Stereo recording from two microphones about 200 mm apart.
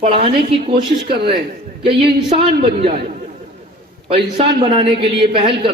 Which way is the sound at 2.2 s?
25° right (ahead or behind).